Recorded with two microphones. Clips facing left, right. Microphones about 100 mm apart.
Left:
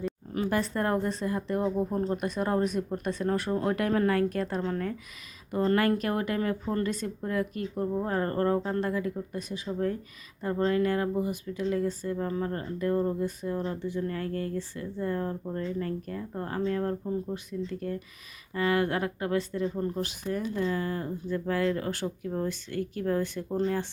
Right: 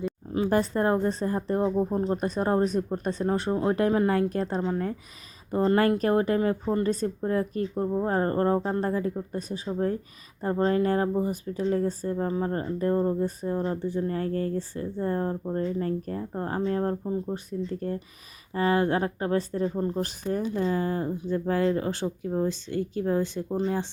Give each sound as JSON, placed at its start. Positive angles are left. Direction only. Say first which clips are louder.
{"t": 0.3, "sound": "speech", "louder": "right 4 dB", "side_deg": -25}
{"t": 1.6, "sound": "speech", "louder": "right 3 dB", "side_deg": -20}
{"t": 2.1, "sound": "speech", "louder": "right 4 dB", "side_deg": -35}
{"t": 4.6, "sound": "speech", "louder": "right 3 dB", "side_deg": -15}
{"t": 5.5, "sound": "speech", "louder": "right 3 dB", "side_deg": -30}
{"t": 6.8, "sound": "speech", "louder": "right 5 dB", "side_deg": -35}
{"t": 17.0, "sound": "speech", "louder": "right 2 dB", "side_deg": -20}
{"t": 17.3, "sound": "speech", "louder": "right 3 dB", "side_deg": -35}